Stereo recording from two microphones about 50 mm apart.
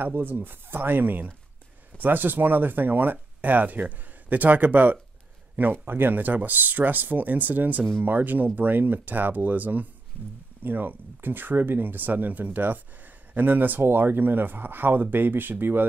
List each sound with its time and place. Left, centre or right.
0.0 s speech: right